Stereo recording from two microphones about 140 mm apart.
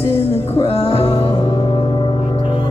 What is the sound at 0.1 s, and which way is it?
Music, 45° left (ahead or behind).